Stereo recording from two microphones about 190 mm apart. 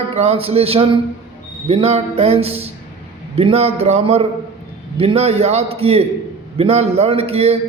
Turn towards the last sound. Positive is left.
turn(degrees=-30)  # may be behind; listen again after turning